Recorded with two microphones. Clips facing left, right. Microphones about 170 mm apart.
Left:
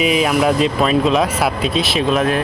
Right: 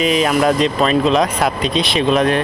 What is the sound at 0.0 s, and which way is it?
Speech, 5° left (ahead or behind).